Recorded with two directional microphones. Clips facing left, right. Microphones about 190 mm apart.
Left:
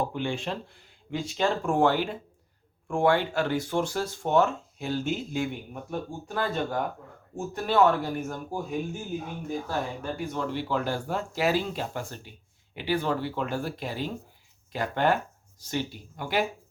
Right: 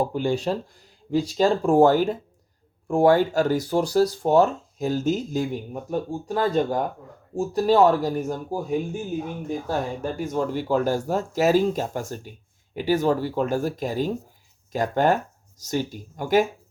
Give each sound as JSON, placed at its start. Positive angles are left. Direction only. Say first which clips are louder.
{"t": 0.0, "sound": "speech", "louder": "right 6 dB", "side_deg": -40}
{"t": 9.6, "sound": "speech", "louder": "right 5 dB", "side_deg": -40}